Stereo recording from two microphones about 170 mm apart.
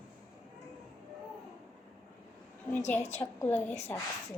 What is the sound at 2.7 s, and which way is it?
A woman's voice, 10° left (ahead or behind).